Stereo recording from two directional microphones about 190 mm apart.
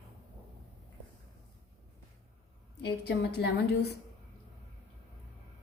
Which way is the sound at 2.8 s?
60° left (ahead or behind).